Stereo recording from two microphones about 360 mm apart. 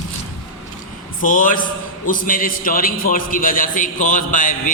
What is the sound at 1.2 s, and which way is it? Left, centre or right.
Mantra, left.